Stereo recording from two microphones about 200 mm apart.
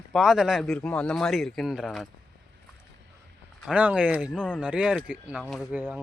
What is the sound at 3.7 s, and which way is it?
Speech, 5° right (ahead or behind).